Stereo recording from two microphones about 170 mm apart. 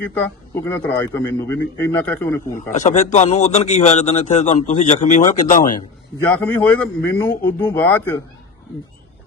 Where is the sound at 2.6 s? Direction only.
50° left (ahead or behind).